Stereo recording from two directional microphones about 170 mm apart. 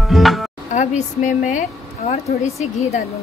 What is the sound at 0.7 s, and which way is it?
Speech, 45° left (ahead or behind).